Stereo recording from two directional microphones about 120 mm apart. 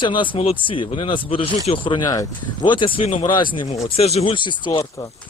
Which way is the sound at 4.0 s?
60° left (ahead or behind).